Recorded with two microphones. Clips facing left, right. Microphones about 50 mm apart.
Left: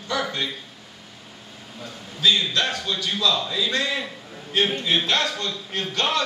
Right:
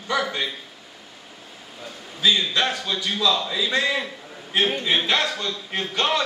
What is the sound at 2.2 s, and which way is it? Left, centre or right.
A man's voice, centre.